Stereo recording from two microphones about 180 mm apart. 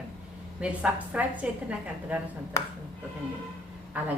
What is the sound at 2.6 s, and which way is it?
Speech, 15° left (ahead or behind).